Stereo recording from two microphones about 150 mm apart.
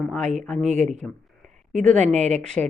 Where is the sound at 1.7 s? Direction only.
5° left (ahead or behind).